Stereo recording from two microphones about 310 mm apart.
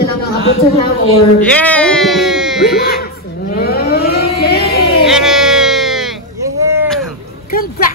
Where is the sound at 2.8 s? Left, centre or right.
Left.